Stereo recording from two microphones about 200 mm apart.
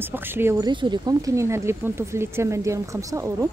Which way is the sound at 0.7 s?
20° right (ahead or behind).